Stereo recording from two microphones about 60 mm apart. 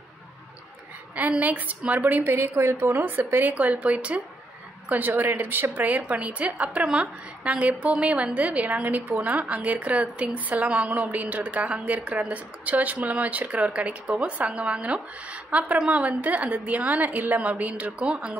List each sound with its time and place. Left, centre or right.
1.4 s a woman's voice: right
3.5 s a woman's voice: right